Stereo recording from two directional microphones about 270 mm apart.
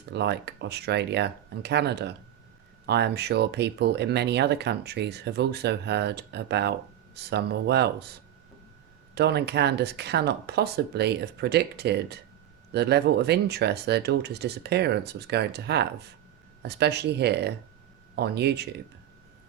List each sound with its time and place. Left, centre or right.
0.1 s speech: right